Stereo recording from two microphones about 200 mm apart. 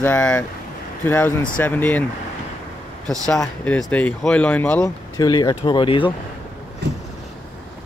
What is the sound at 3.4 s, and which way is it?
Speech, 5° left (ahead or behind).